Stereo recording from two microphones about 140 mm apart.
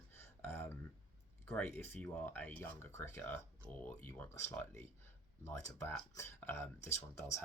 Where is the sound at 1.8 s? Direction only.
10° left (ahead or behind).